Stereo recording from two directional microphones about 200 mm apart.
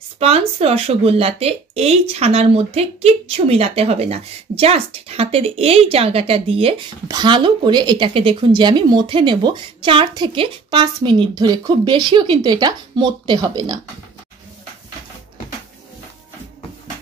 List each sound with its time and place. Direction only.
0.2 s speech: 30° right (ahead or behind)